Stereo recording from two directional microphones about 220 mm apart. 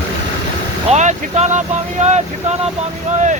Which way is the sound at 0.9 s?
30° right (ahead or behind).